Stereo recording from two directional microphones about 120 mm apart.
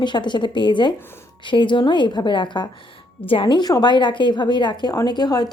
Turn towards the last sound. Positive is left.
turn(degrees=35)  # may be behind; listen again after turning